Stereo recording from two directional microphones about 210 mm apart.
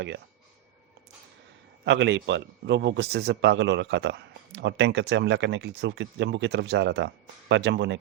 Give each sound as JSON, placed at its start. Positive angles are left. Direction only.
{"t": 1.8, "sound": "speech", "side_deg": -55}